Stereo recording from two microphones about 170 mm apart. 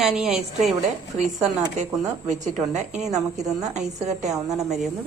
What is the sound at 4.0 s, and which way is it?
Speech, 40° right (ahead or behind).